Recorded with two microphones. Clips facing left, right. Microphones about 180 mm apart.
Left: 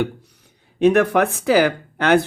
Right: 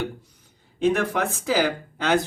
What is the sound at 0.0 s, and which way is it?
Speech, 70° left (ahead or behind).